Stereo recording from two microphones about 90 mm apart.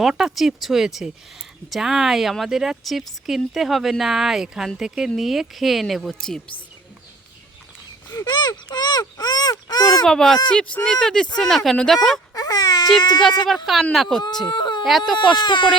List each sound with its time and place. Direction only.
0.0 s speech: 5° right (ahead or behind)
8.1 s speech: 45° left (ahead or behind)
10.0 s speech: 5° left (ahead or behind)
12.3 s baby cry: 45° left (ahead or behind)
13.0 s speech: 50° left (ahead or behind)
13.9 s speech: 5° left (ahead or behind)
14.4 s whimper: 55° left (ahead or behind)
14.8 s speech: centre (ahead or behind)
15.4 s speech: 60° left (ahead or behind)